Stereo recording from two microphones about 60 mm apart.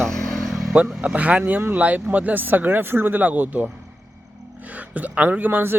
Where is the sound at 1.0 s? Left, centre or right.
Right.